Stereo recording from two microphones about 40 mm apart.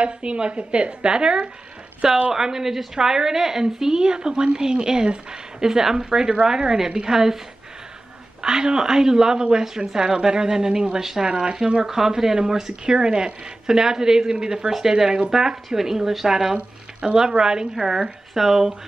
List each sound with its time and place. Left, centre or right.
0.0 s a woman's voice: right
2.3 s a woman's voice: centre
8.4 s a woman's voice: centre